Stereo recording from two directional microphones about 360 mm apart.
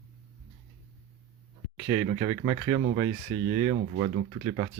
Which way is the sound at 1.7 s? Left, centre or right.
Centre.